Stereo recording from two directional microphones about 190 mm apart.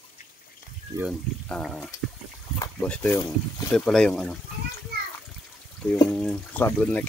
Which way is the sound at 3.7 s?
5° left (ahead or behind).